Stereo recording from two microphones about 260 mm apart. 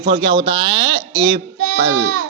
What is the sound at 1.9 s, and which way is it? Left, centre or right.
Speech, right.